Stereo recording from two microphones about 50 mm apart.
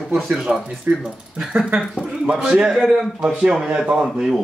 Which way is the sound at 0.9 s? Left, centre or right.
Right.